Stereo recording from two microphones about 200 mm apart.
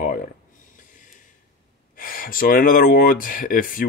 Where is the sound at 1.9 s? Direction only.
45° left (ahead or behind).